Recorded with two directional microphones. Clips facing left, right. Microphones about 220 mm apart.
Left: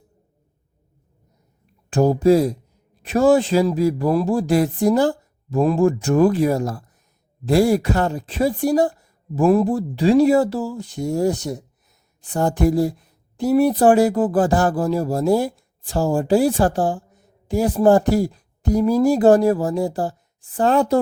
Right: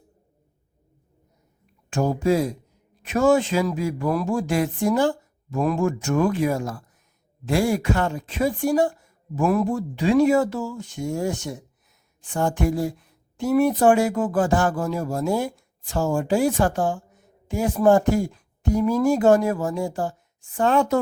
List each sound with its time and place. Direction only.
1.9 s speech: 35° left (ahead or behind)